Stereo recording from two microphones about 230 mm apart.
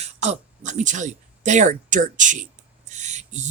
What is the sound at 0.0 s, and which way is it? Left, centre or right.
Speech, right.